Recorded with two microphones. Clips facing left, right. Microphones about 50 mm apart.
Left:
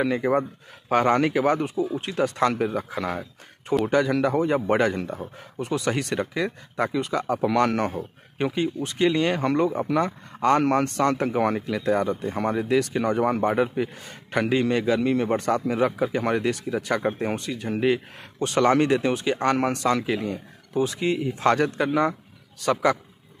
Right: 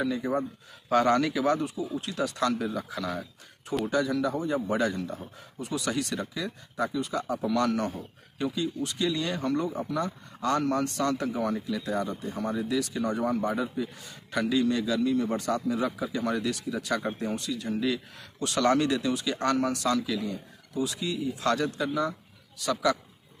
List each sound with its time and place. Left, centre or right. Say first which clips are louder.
0.0 s speech: left 6 dB; left
3.8 s a man's voice: left 4 dB; left
22.6 s speech: left 5 dB; left